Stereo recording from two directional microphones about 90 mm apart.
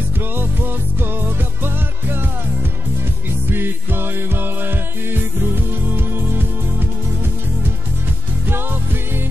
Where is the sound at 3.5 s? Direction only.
25° right (ahead or behind).